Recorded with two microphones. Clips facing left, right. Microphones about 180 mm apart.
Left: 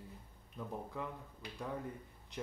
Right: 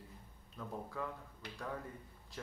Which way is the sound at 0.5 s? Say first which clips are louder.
Left 1 dB; 15° left (ahead or behind).